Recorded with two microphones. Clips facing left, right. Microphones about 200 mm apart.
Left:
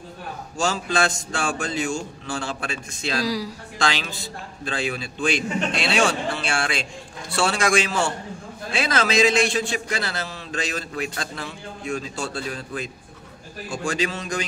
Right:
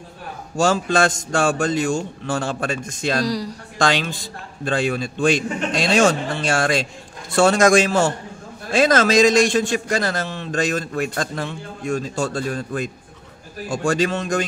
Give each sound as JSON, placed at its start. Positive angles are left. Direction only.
{"t": 0.7, "sound": "a man's voice", "side_deg": -50}
{"t": 3.3, "sound": "speech", "side_deg": 0}
{"t": 3.7, "sound": "a woman's voice", "side_deg": -50}